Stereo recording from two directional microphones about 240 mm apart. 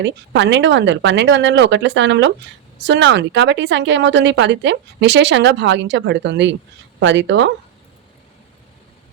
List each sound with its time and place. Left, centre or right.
0.0 s a woman's voice: right